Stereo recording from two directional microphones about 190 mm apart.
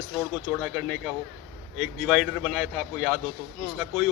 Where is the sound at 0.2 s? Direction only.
Centre (ahead or behind).